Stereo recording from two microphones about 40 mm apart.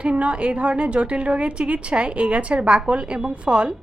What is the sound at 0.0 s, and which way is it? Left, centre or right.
A woman's voice, right.